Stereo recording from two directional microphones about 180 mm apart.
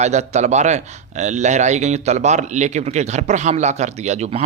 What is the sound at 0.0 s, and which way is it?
A man's voice, 40° right (ahead or behind).